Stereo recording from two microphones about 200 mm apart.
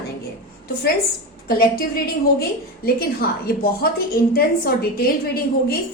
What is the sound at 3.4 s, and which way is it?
A woman's voice, 50° left (ahead or behind).